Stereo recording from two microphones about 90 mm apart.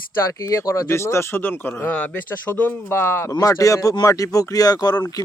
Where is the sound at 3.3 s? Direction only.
35° left (ahead or behind).